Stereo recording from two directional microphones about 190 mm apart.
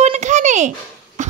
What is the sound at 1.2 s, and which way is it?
Cough, 40° right (ahead or behind).